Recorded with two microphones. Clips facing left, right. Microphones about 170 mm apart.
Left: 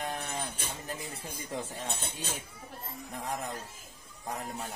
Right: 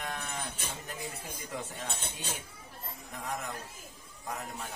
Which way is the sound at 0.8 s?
30° left (ahead or behind).